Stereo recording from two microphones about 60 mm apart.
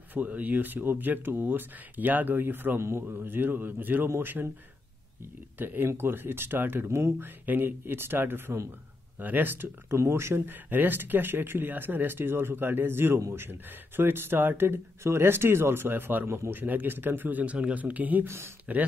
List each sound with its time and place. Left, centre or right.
0.1 s speech: right
5.6 s speech: right
7.2 s speech: right
9.9 s speech: right
18.2 s speech: right